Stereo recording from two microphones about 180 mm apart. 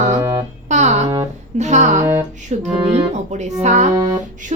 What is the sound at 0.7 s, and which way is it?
A woman's voice, 40° right (ahead or behind).